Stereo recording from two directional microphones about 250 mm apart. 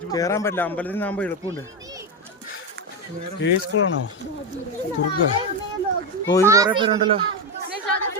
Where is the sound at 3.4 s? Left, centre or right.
Left.